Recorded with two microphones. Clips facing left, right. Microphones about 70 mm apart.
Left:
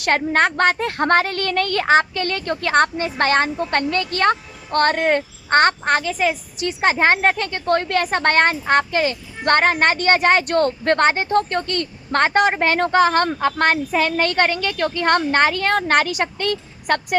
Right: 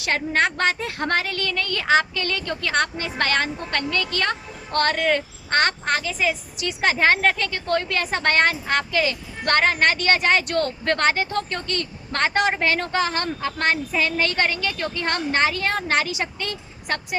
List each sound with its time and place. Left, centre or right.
0.0 s a woman's voice: left